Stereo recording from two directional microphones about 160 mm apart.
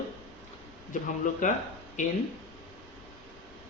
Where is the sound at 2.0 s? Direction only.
50° left (ahead or behind).